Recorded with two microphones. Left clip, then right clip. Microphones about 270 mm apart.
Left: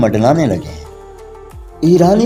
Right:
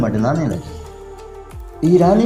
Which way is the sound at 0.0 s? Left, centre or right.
Left.